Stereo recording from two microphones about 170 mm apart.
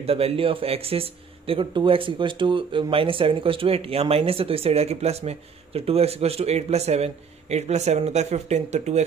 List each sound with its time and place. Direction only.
0.0 s speech: 35° right (ahead or behind)